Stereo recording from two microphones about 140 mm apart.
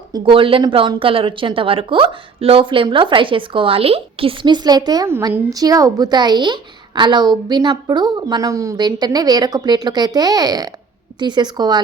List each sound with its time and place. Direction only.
0.1 s speech: 35° right (ahead or behind)
5.0 s a woman's voice: 15° right (ahead or behind)